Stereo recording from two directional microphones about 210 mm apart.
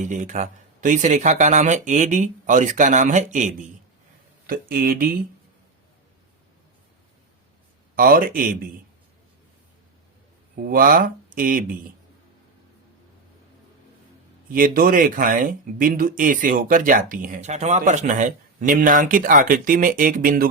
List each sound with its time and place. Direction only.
0.0 s speech: 35° right (ahead or behind)
7.9 s speech: 45° right (ahead or behind)
10.5 s speech: 45° right (ahead or behind)
14.5 s speech: 40° right (ahead or behind)